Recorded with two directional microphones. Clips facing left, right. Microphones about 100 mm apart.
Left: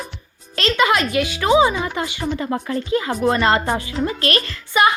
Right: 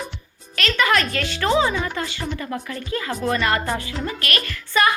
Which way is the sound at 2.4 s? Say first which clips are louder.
Left 6 dB; 35° left (ahead or behind).